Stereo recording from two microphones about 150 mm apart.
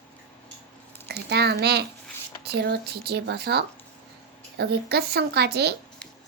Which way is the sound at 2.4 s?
90° right.